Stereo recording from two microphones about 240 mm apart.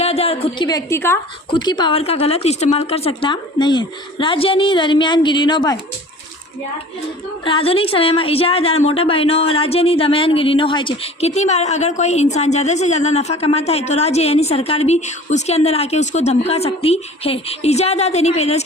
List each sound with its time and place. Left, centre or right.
0.0 s a woman's voice: left
7.4 s a woman's voice: left